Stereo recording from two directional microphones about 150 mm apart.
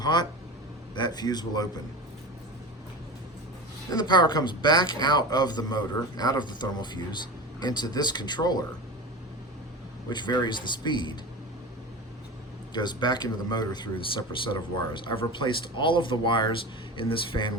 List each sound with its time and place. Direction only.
0.0 s speech: 30° left (ahead or behind)
3.9 s speech: 30° left (ahead or behind)
10.1 s speech: 30° left (ahead or behind)
12.7 s speech: 30° left (ahead or behind)